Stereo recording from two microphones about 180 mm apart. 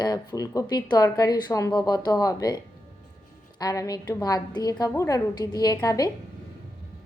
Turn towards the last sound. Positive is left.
turn(degrees=20)  # may be behind; listen again after turning